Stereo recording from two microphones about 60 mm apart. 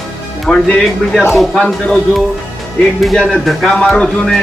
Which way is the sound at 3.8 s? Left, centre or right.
Centre.